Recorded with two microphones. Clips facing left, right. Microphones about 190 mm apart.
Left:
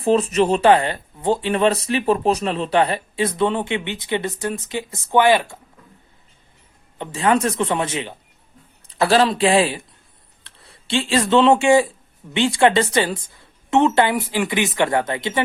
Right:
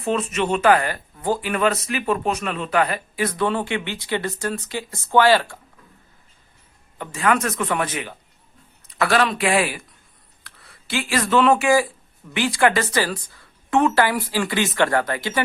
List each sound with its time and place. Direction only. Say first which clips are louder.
0.0 s speech: left 6 dB; 35° left (ahead or behind)
7.0 s speech: left 3 dB; 25° left (ahead or behind)